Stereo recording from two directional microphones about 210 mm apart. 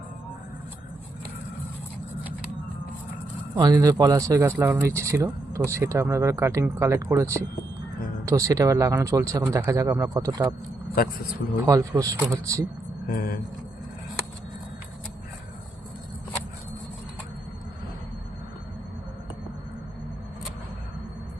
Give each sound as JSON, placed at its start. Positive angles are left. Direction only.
{"t": 3.5, "sound": "speech", "side_deg": -20}
{"t": 11.6, "sound": "speech", "side_deg": -15}
{"t": 13.1, "sound": "speech", "side_deg": 45}